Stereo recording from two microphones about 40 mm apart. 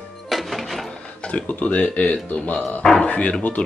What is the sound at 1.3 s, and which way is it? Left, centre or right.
Speech, left.